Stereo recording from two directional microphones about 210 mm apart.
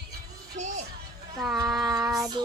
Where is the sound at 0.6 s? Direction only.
35° right (ahead or behind).